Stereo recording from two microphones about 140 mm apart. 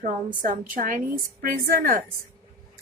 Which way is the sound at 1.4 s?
90° right.